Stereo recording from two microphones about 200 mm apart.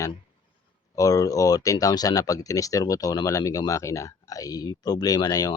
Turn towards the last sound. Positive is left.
turn(degrees=20)  # may be behind; listen again after turning